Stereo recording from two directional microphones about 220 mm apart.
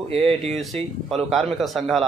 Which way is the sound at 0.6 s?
Centre (ahead or behind).